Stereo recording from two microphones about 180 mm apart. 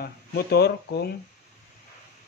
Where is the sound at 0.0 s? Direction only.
65° left (ahead or behind).